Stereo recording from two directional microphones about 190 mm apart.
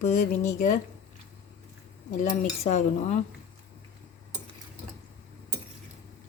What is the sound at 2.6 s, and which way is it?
Speech, 40° left (ahead or behind).